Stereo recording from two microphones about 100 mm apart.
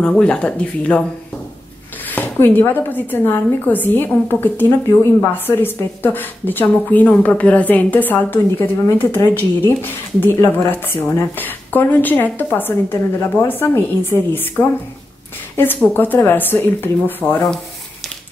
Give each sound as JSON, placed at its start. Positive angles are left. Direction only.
{"t": 0.0, "sound": "speech", "side_deg": 10}
{"t": 2.1, "sound": "a woman's voice", "side_deg": 20}